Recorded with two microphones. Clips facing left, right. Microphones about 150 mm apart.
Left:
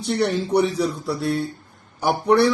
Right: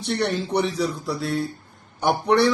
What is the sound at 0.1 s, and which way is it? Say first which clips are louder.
A man's voice: left 3 dB; 5° left (ahead or behind).